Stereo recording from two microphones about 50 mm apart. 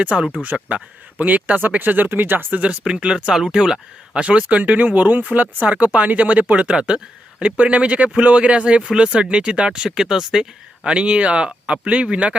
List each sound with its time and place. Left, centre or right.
0.0 s a man's voice: right
2.5 s a man's voice: right
4.2 s a man's voice: right
10.8 s a man's voice: right